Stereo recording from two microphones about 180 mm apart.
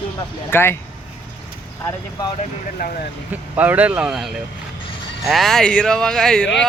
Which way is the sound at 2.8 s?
60° left (ahead or behind).